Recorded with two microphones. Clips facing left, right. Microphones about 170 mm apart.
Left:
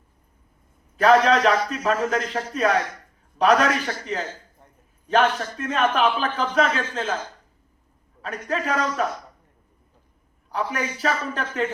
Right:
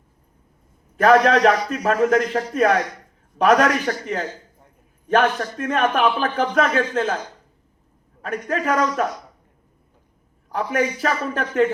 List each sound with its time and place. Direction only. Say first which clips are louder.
0.9 s a man's voice: right 2 dB; 55° right (ahead or behind)
8.4 s a man's voice: right 3 dB; 50° right (ahead or behind)
10.5 s a man's voice: right 5 dB; 50° right (ahead or behind)